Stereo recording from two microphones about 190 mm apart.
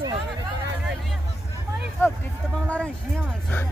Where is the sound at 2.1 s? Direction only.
5° right (ahead or behind).